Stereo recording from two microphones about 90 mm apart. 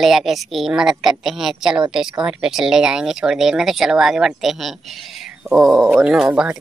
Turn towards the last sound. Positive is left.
turn(degrees=-10)  # may be behind; listen again after turning